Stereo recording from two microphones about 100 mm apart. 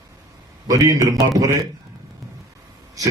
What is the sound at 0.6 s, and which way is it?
Speech, 35° right (ahead or behind).